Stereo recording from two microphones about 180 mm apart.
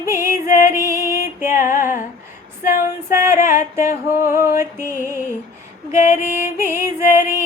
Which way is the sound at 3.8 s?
45° left (ahead or behind).